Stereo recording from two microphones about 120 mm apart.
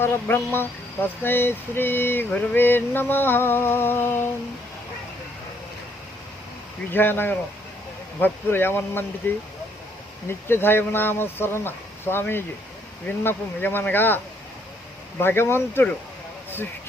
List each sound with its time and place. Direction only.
0.0 s speech: 20° left (ahead or behind)
6.9 s speech: 15° left (ahead or behind)
10.2 s speech: 20° left (ahead or behind)
15.2 s speech: 20° left (ahead or behind)